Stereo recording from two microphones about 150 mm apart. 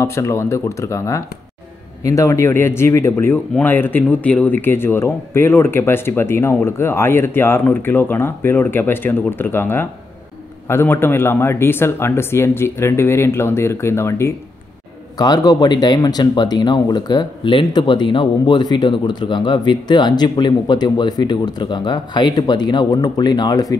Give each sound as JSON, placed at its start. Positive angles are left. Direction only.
{"t": 0.0, "sound": "speech", "side_deg": 20}